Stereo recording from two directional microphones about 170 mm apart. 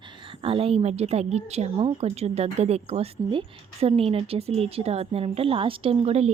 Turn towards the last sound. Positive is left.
turn(degrees=-35)  # may be behind; listen again after turning